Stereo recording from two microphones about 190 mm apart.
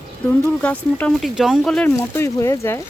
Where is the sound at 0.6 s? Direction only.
5° left (ahead or behind).